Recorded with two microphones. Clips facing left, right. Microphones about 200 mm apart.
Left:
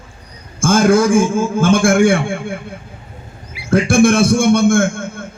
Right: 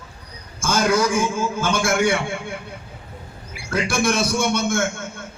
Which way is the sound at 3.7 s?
50° left (ahead or behind).